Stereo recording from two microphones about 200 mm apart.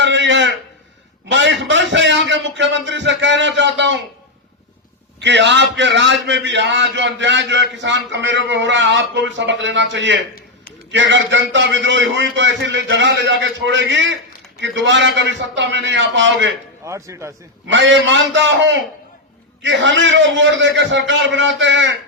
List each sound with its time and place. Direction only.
0.0 s a sound: 65° right (ahead or behind)
1.3 s a man's voice: 65° right (ahead or behind)
5.2 s a man's voice: 60° right (ahead or behind)
16.8 s speech: 15° right (ahead or behind)
17.7 s a man's voice: 65° right (ahead or behind)